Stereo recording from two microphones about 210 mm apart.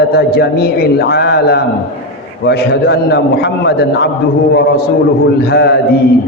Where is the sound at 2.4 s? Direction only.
50° left (ahead or behind).